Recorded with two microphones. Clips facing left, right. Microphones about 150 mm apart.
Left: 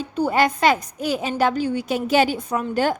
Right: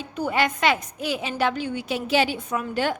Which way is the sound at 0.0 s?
40° left (ahead or behind).